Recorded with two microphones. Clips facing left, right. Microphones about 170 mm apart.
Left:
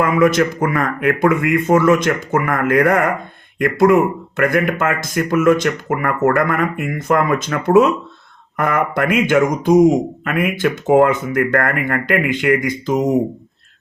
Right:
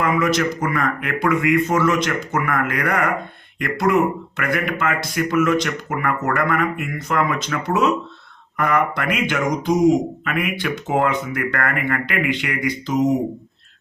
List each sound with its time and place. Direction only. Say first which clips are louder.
0.0 s a man's voice: left 5 dB; 50° left (ahead or behind)